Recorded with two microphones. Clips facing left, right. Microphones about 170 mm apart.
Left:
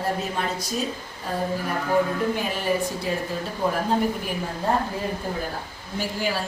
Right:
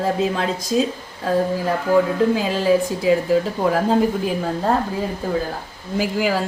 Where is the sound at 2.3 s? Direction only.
90° right.